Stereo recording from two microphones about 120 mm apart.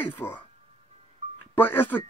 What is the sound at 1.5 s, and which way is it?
Speech, 15° left (ahead or behind).